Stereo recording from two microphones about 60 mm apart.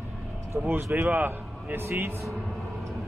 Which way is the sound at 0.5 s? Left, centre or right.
Right.